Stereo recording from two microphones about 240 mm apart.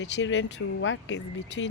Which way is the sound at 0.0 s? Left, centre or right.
Left.